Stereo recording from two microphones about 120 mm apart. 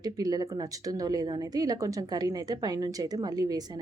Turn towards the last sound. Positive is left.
turn(degrees=-30)  # may be behind; listen again after turning